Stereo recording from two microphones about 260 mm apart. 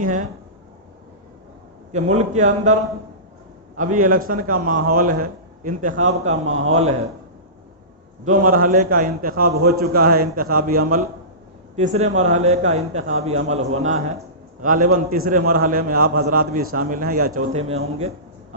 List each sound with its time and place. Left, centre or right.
0.0 s a man's voice: right
1.9 s a man's voice: right
3.8 s a man's voice: right
5.9 s a man's voice: right
6.7 s a man's voice: right
8.2 s a man's voice: right